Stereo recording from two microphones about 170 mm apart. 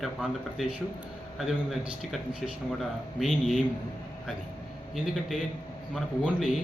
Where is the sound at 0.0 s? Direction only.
Centre (ahead or behind).